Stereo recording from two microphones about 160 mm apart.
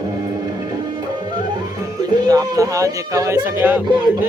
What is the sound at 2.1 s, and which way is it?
Speech, 25° right (ahead or behind).